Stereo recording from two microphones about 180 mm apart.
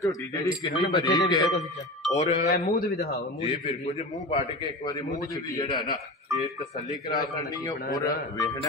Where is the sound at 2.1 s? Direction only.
40° left (ahead or behind).